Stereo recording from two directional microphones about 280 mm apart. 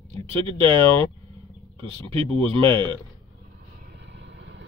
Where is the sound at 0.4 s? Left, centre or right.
Centre.